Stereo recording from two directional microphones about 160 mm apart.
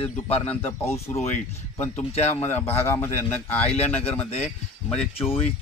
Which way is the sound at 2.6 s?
15° left (ahead or behind).